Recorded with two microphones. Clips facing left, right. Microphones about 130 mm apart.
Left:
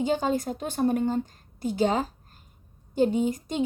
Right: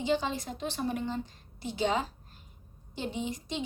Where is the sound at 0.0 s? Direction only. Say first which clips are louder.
Left 5 dB; 45° left (ahead or behind).